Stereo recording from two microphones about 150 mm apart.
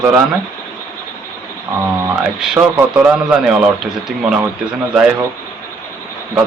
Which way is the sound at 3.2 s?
5° right (ahead or behind).